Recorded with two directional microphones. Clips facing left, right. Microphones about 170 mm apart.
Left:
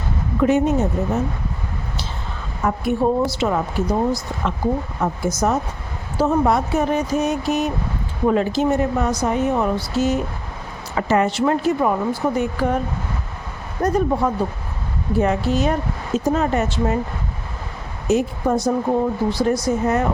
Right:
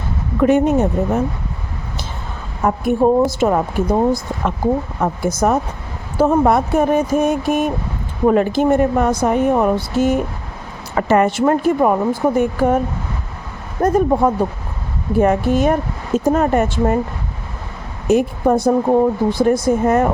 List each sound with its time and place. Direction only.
0.4 s speech: 55° right (ahead or behind)
2.6 s speech: 45° right (ahead or behind)
13.8 s speech: 50° right (ahead or behind)
18.1 s speech: 55° right (ahead or behind)